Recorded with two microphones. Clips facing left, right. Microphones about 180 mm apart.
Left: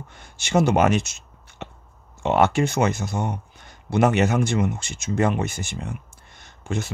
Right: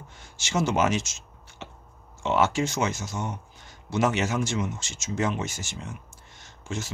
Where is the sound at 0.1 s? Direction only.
60° left (ahead or behind).